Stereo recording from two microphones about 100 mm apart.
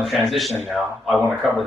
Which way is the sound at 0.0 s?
Centre (ahead or behind).